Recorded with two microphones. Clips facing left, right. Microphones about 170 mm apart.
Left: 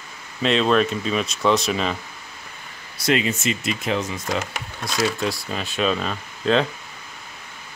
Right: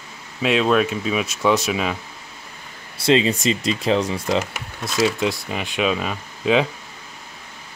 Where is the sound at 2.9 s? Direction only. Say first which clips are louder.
Right 4 dB; 30° right (ahead or behind).